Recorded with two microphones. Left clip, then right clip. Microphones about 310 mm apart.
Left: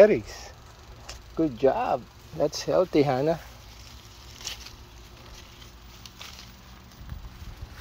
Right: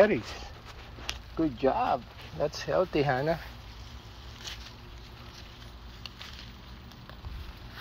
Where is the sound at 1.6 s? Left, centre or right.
Left.